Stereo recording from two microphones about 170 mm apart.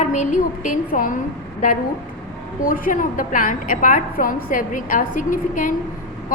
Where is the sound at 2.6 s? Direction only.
55° left (ahead or behind).